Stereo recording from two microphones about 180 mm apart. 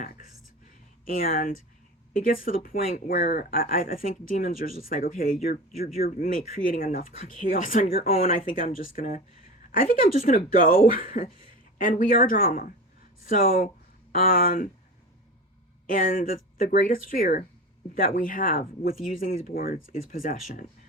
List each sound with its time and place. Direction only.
1.0 s speech: 50° left (ahead or behind)
15.9 s speech: 45° left (ahead or behind)